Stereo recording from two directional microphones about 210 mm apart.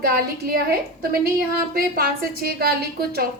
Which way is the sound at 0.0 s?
45° right (ahead or behind).